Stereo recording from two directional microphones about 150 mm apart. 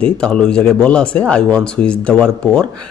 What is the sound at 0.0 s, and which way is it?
A man's voice, 5° left (ahead or behind).